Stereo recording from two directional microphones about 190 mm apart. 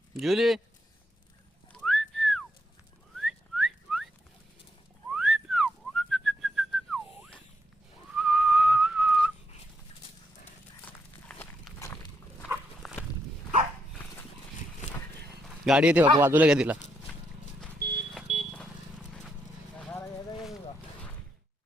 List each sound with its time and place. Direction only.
0.2 s speech: centre (ahead or behind)
1.7 s whistling: centre (ahead or behind)
5.1 s whistling: centre (ahead or behind)
10.8 s a sound: 5° left (ahead or behind)
12.8 s walk: centre (ahead or behind)
15.6 s a man's voice: 5° right (ahead or behind)
17.7 s vehicle: 55° right (ahead or behind)
18.3 s vehicle: 35° right (ahead or behind)
19.7 s clip-clop: 10° left (ahead or behind)